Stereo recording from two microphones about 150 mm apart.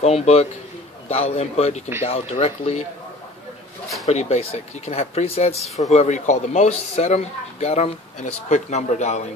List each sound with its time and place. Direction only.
0.0 s speech: 45° left (ahead or behind)
4.1 s speech: 45° left (ahead or behind)